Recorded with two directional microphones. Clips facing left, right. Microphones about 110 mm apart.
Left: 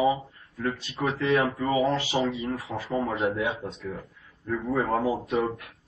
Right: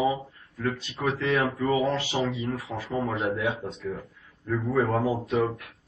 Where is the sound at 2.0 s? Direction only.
5° left (ahead or behind).